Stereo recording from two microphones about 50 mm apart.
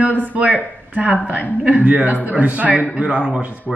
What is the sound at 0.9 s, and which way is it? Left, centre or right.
A woman's voice, right.